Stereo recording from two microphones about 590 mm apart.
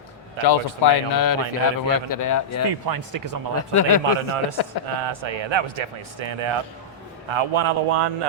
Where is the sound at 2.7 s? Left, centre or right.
Right.